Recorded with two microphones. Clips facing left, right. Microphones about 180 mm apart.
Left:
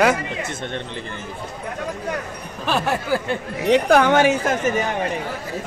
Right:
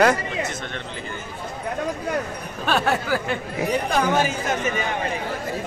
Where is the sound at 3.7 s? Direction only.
70° left (ahead or behind).